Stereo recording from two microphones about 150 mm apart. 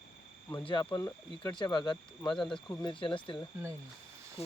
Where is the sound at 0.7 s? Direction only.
30° left (ahead or behind).